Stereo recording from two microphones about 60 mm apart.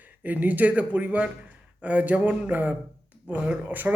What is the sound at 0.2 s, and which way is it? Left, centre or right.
A man's voice, right.